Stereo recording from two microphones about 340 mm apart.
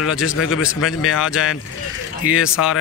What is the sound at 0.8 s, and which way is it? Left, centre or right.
Speech, left.